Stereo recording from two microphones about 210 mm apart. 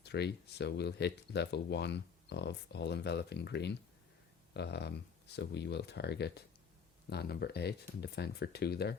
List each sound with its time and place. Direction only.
0.0 s speech: 50° left (ahead or behind)